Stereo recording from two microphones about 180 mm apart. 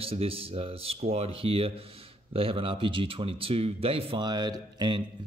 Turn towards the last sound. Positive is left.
turn(degrees=-25)  # may be behind; listen again after turning